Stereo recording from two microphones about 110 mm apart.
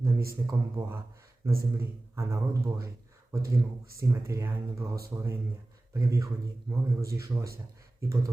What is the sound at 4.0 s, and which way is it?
Speech, 25° right (ahead or behind).